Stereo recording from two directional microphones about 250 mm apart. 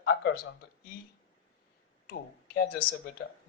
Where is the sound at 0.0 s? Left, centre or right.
Left.